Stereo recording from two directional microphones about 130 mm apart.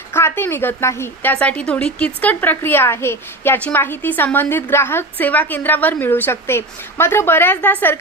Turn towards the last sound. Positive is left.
turn(degrees=15)  # may be behind; listen again after turning